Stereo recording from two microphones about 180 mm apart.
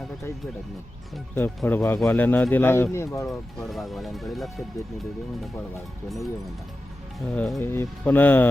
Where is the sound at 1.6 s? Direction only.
Centre (ahead or behind).